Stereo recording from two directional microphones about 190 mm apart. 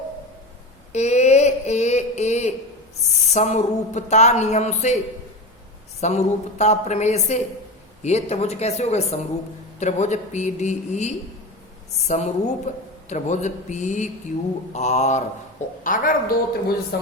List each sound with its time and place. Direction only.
0.9 s a sound: 35° left (ahead or behind)
3.3 s speech: 40° left (ahead or behind)
6.0 s a woman's voice: 35° left (ahead or behind); by 17.1 s 55° left (ahead or behind)